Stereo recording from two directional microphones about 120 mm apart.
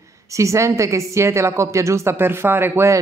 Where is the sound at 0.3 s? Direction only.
25° right (ahead or behind).